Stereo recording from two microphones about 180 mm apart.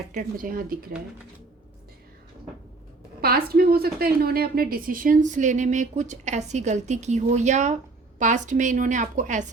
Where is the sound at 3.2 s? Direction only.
60° right (ahead or behind).